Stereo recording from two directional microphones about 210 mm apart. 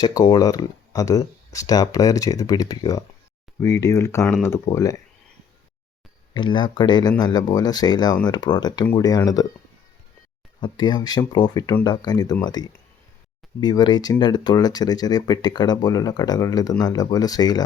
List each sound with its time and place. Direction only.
0.0 s speech: 20° left (ahead or behind)
6.3 s speech: 20° left (ahead or behind)
10.6 s speech: 20° left (ahead or behind)